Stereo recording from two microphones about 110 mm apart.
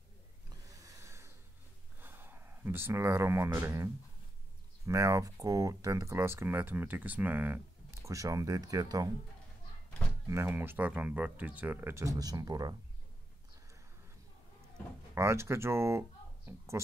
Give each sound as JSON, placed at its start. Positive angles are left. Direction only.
{"t": 0.5, "sound": "snort", "side_deg": -30}
{"t": 2.0, "sound": "speech", "side_deg": -20}
{"t": 10.2, "sound": "speech", "side_deg": -25}
{"t": 15.1, "sound": "speech", "side_deg": -25}